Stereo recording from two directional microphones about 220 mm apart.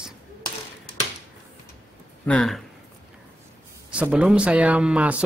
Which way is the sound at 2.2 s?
5° left (ahead or behind).